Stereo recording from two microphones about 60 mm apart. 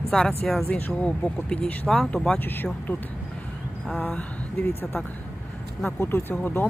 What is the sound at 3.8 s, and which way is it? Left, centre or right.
Speech, left.